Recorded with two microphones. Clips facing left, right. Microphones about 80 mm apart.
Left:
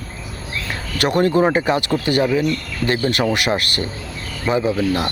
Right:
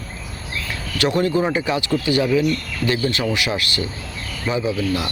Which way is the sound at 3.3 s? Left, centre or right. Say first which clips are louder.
Left 3 dB; left.